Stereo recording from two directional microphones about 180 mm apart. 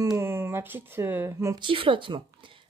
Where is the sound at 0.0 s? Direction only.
15° right (ahead or behind).